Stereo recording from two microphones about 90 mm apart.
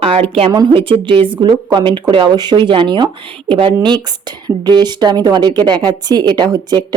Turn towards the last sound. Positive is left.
turn(degrees=-50)  # may be behind; listen again after turning